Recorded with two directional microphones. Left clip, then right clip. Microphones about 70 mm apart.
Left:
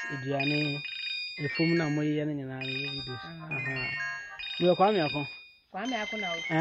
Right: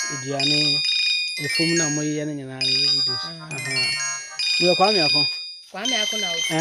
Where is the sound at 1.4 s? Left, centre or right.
Centre.